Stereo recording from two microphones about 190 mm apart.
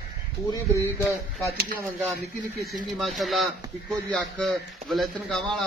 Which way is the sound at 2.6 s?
Centre (ahead or behind).